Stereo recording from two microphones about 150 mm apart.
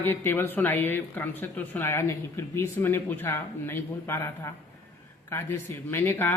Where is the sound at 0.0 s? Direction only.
15° left (ahead or behind).